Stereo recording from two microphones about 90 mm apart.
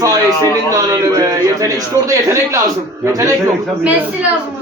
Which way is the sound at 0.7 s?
40° right (ahead or behind).